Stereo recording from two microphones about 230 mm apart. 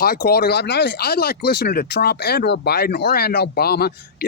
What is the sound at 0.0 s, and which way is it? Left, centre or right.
Speech, left.